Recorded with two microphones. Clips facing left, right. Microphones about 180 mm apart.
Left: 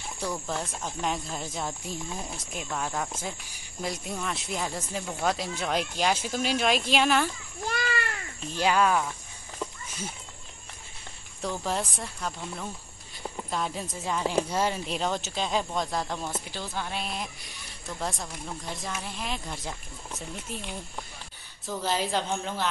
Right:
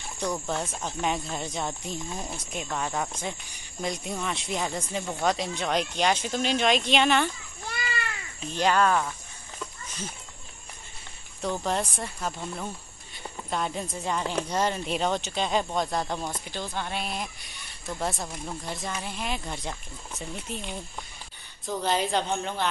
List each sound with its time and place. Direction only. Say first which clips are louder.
0.2 s speech: right 3 dB; 5° left (ahead or behind)
7.6 s a sound: left 5 dB; 45° left (ahead or behind)
8.5 s speech: right 1 dB; 10° left (ahead or behind)
11.6 s speech: right 2 dB; centre (ahead or behind)